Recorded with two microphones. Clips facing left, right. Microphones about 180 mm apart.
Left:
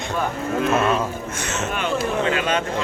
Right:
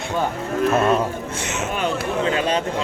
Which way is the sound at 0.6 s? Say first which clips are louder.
Right 2 dB; 40° right (ahead or behind).